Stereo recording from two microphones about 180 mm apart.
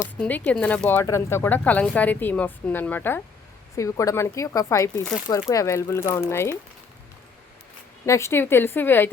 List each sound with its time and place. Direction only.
0.0 s speech: 10° left (ahead or behind)
8.0 s speech: 15° left (ahead or behind)